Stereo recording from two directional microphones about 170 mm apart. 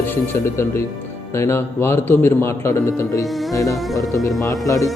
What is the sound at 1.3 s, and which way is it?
A man's voice, 15° left (ahead or behind).